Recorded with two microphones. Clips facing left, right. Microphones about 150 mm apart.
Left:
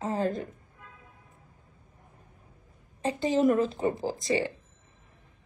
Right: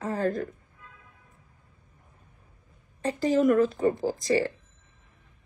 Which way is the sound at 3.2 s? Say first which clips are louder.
Right 2 dB; 25° left (ahead or behind).